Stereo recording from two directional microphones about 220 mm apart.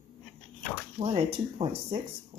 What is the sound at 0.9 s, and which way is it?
Speech, 25° right (ahead or behind).